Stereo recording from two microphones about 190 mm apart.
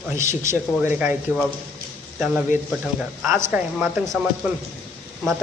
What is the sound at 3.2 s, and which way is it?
A man's voice, 15° right (ahead or behind).